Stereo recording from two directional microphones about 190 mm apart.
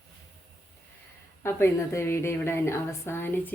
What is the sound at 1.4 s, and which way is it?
Speech, 15° left (ahead or behind).